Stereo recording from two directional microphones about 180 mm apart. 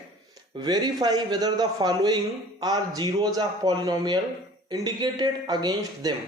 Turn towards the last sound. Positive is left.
turn(degrees=-20)  # may be behind; listen again after turning